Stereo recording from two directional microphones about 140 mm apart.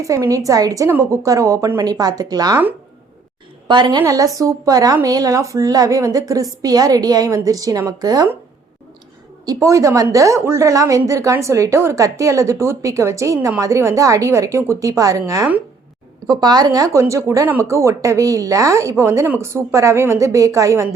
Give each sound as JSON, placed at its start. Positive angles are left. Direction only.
{"t": 0.0, "sound": "speech", "side_deg": -25}
{"t": 3.7, "sound": "a woman's voice", "side_deg": -35}
{"t": 9.5, "sound": "speech", "side_deg": -25}